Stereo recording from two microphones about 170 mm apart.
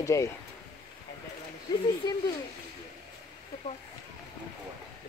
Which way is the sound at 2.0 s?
25° left (ahead or behind).